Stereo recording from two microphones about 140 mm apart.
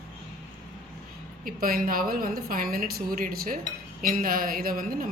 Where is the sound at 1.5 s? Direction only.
90° right.